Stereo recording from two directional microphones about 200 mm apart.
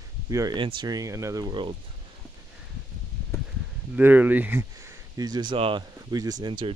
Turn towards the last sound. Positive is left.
turn(degrees=-20)  # may be behind; listen again after turning